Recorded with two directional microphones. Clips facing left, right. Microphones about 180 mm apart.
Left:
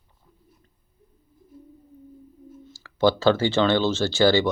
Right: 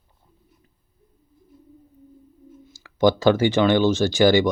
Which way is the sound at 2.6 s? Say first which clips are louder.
Right 2 dB; 15° right (ahead or behind).